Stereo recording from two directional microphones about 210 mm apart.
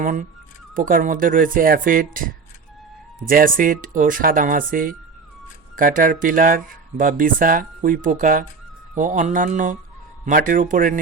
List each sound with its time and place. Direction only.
0.0 s speech: 40° right (ahead or behind)